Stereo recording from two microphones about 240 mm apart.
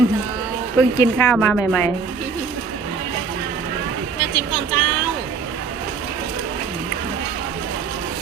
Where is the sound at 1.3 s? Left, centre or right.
Centre.